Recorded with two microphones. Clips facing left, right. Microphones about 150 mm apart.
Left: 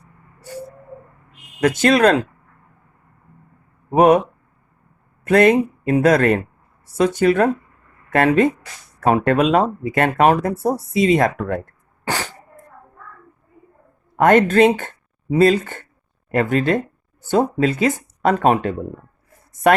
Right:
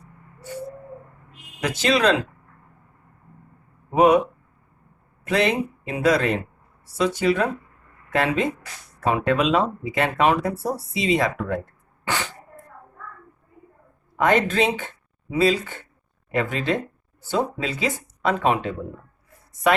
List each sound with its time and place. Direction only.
1.8 s speech: 50° left (ahead or behind)
3.9 s speech: 45° left (ahead or behind)
5.2 s speech: 50° left (ahead or behind)
14.2 s speech: 50° left (ahead or behind)